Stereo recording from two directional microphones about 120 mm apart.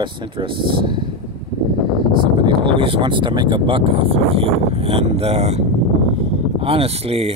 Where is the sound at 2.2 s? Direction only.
40° right (ahead or behind).